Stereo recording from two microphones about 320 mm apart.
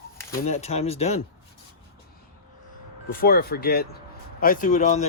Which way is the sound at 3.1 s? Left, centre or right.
Left.